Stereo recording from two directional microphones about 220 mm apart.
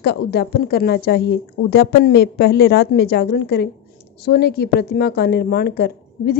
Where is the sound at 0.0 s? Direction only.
50° left (ahead or behind).